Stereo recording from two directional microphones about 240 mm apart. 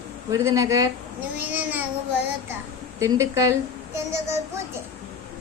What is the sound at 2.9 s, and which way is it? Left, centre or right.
Speech, centre.